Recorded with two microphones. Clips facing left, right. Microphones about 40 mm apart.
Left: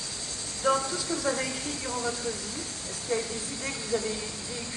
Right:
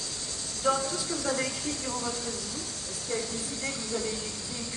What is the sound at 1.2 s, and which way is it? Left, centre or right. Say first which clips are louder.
Speech: right 1 dB; centre.